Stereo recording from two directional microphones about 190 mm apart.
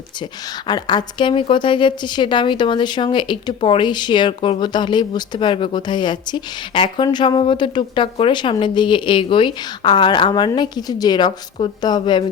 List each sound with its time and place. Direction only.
0.7 s a woman's voice: 25° left (ahead or behind)